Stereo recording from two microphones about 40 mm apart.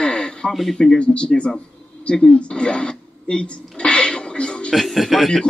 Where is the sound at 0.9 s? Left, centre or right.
Left.